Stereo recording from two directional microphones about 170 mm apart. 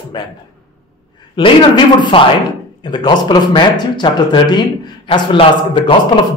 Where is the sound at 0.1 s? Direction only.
25° left (ahead or behind).